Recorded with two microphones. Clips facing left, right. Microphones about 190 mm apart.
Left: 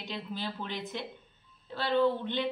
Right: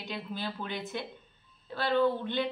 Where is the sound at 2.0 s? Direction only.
10° right (ahead or behind).